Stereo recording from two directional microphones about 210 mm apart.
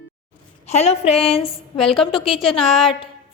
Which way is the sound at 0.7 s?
30° left (ahead or behind).